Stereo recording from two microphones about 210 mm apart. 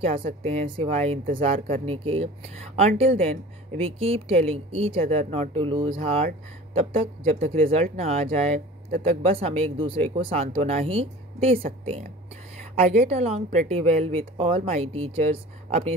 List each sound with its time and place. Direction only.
0.0 s a woman's voice: 30° right (ahead or behind)
13.0 s a woman's voice: 30° right (ahead or behind)